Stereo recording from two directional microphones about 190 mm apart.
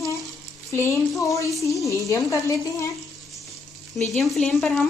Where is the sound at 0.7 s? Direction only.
15° left (ahead or behind).